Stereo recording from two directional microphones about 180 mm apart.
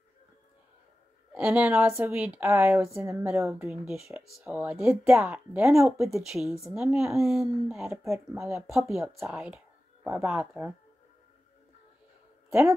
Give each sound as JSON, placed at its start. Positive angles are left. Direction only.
{"t": 1.3, "sound": "speech", "side_deg": -10}
{"t": 3.8, "sound": "speech", "side_deg": -5}
{"t": 6.0, "sound": "speech", "side_deg": 0}
{"t": 6.8, "sound": "speech", "side_deg": -15}
{"t": 7.1, "sound": "speech", "side_deg": 0}
{"t": 7.9, "sound": "speech", "side_deg": -15}
{"t": 8.5, "sound": "speech", "side_deg": 0}
{"t": 12.4, "sound": "a sound", "side_deg": -15}